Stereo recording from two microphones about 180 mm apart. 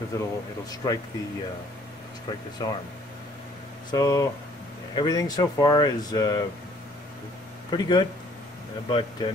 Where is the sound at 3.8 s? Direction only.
20° left (ahead or behind).